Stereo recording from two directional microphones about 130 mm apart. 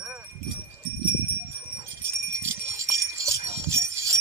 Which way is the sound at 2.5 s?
20° right (ahead or behind).